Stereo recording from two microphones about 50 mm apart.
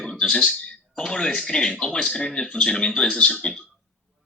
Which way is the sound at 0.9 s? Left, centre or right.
Centre.